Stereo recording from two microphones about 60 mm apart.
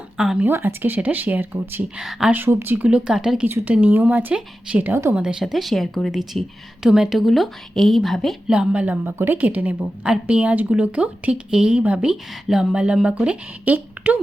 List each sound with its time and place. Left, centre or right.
0.4 s speech: right
2.0 s speech: centre
2.3 s speech: right
2.7 s speech: right
3.1 s speech: centre
3.4 s speech: right; by 8.4 s centre
8.4 s speech: centre
9.0 s speech: right
12.5 s a woman's voice: centre; by 14.2 s right